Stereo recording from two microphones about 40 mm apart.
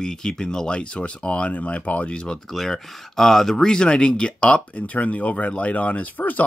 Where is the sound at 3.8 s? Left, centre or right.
Left.